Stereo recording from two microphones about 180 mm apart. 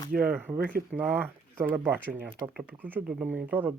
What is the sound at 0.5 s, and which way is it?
Speech, 55° right (ahead or behind).